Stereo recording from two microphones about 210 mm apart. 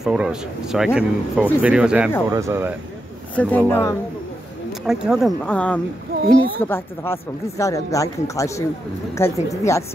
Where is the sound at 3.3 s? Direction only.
5° left (ahead or behind).